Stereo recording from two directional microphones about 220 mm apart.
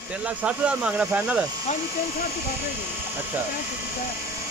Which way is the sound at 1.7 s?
30° left (ahead or behind).